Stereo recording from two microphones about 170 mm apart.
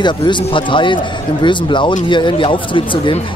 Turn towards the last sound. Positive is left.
turn(degrees=30)  # may be behind; listen again after turning